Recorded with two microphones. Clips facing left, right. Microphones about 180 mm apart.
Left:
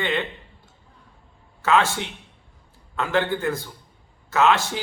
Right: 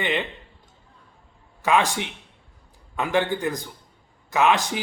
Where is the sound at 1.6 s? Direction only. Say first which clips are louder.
Left 1 dB; 15° right (ahead or behind).